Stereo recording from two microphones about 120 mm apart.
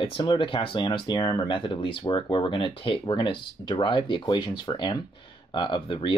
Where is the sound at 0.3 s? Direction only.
45° left (ahead or behind).